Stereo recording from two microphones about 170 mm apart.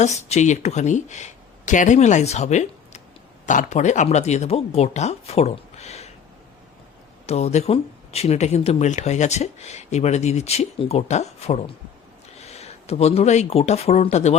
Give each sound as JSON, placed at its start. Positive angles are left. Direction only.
{"t": 0.0, "sound": "speech", "side_deg": 40}
{"t": 7.3, "sound": "speech", "side_deg": 40}